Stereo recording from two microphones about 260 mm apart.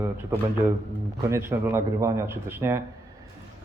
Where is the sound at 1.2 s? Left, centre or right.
Centre.